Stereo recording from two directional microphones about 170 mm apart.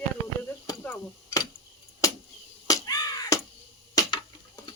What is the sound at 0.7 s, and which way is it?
Speech, 15° left (ahead or behind).